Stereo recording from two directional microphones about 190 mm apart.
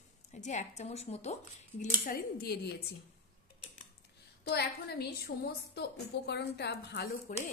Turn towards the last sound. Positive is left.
turn(degrees=55)  # may be behind; listen again after turning